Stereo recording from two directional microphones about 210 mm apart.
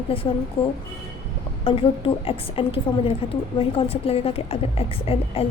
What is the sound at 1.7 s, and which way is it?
A woman's voice, 25° left (ahead or behind).